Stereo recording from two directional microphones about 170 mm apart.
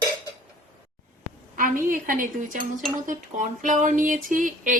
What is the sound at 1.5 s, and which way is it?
Speech, 55° right (ahead or behind).